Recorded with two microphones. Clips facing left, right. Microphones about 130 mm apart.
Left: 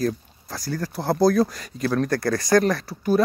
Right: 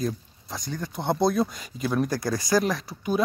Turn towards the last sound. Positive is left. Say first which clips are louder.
# left 5 dB
turn(degrees=0)  # may be behind; listen again after turning